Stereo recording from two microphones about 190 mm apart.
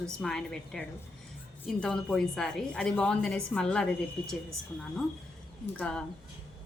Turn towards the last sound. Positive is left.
turn(degrees=5)  # may be behind; listen again after turning